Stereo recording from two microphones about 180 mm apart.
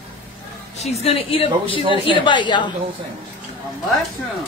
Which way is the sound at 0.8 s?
35° left (ahead or behind).